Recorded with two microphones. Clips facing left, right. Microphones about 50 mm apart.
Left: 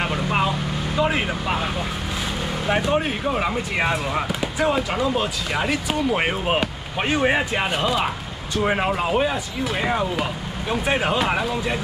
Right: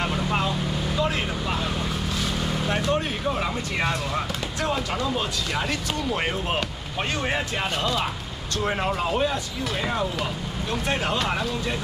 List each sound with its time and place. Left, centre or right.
0.0 s vehicle: centre
2.7 s speech: centre